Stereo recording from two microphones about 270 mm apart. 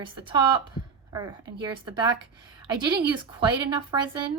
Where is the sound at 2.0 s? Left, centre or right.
Centre.